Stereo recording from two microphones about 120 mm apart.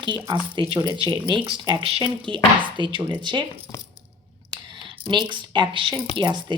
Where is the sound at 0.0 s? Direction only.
40° right (ahead or behind).